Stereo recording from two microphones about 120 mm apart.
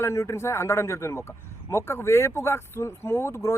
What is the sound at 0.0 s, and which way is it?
Speech, 25° left (ahead or behind).